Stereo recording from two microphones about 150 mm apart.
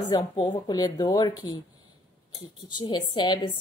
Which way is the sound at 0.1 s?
25° left (ahead or behind).